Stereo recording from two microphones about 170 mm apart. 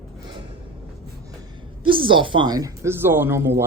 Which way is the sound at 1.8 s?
30° right (ahead or behind).